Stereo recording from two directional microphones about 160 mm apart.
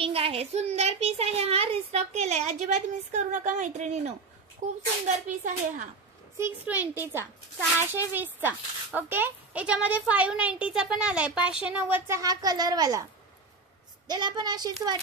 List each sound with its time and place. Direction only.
0.0 s a child's voice: 35° right (ahead or behind)
5.0 s speech: 50° right (ahead or behind)
6.3 s speech: 15° right (ahead or behind)
14.0 s a woman's voice: 25° right (ahead or behind)